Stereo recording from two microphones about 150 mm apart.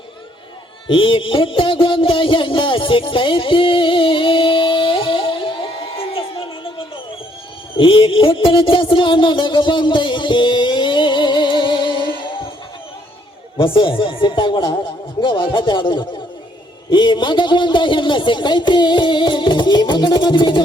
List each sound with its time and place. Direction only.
0.9 s music: 35° left (ahead or behind)
7.8 s music: 35° left (ahead or behind)
13.6 s speech: 35° left (ahead or behind)